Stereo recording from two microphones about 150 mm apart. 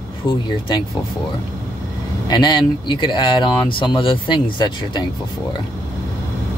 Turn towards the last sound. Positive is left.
turn(degrees=30)  # may be behind; listen again after turning